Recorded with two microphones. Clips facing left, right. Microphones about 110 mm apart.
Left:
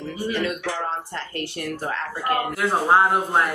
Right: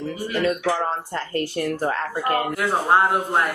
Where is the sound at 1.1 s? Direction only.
40° right (ahead or behind).